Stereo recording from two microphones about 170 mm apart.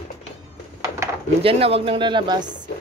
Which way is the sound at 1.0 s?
15° right (ahead or behind).